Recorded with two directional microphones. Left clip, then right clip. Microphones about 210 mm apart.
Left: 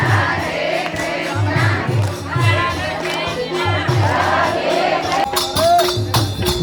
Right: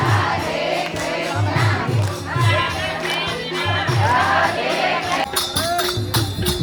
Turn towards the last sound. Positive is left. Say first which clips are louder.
# left 3 dB
turn(degrees=25)  # may be behind; listen again after turning